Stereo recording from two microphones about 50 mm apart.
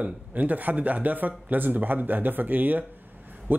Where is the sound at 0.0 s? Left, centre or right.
Right.